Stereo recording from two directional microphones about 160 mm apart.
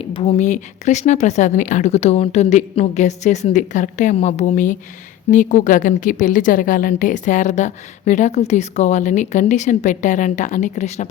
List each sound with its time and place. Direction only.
0.0 s a woman's voice: 35° left (ahead or behind)